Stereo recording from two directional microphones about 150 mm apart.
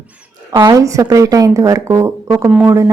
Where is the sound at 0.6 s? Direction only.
20° right (ahead or behind).